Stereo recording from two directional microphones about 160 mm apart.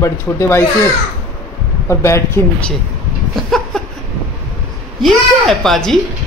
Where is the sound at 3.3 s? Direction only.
Centre (ahead or behind).